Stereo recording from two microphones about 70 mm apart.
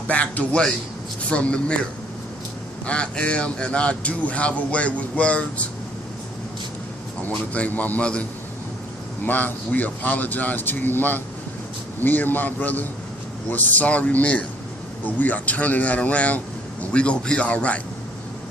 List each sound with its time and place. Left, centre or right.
0.1 s a man's voice: centre
7.3 s a man's voice: left